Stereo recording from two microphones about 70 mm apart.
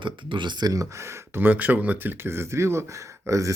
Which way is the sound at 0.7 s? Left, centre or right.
Right.